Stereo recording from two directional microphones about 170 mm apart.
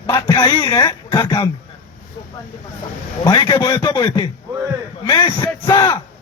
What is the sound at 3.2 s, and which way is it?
Speech, 25° left (ahead or behind).